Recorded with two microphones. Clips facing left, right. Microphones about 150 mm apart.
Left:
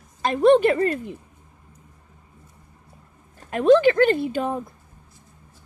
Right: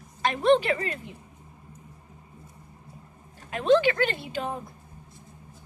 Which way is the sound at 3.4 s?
45° left (ahead or behind).